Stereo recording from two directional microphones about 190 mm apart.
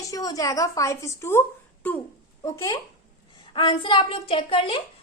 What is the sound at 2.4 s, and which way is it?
A woman's voice, 15° left (ahead or behind).